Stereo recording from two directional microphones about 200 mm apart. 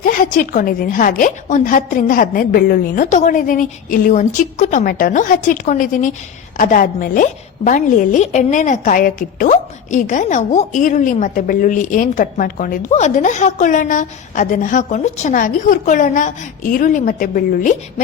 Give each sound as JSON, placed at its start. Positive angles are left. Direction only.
{"t": 0.0, "sound": "a woman's voice", "side_deg": 40}